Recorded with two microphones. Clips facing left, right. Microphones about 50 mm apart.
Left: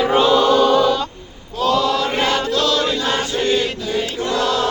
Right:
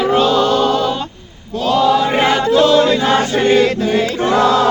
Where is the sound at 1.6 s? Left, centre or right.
Centre; by 2.9 s right.